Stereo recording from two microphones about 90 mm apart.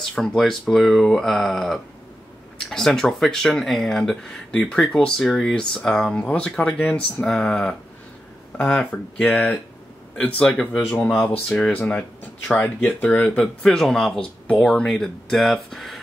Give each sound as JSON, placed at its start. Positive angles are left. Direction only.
{"t": 0.1, "sound": "speech", "side_deg": 10}
{"t": 13.6, "sound": "speech", "side_deg": 5}